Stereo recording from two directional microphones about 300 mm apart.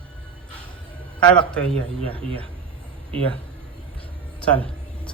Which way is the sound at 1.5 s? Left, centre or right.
Centre.